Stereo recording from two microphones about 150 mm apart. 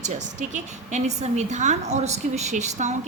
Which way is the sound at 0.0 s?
55° right (ahead or behind).